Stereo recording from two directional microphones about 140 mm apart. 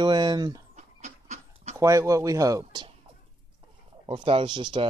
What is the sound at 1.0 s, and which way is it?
Dog, 55° right (ahead or behind).